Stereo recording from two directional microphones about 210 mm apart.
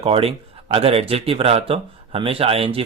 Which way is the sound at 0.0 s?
30° right (ahead or behind).